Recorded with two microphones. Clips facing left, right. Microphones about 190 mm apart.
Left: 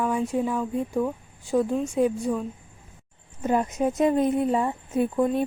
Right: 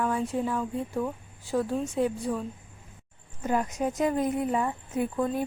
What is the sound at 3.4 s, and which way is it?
Speech, 25° left (ahead or behind).